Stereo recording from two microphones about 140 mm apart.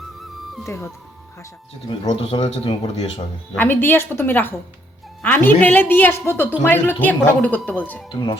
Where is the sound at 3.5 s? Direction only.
15° left (ahead or behind).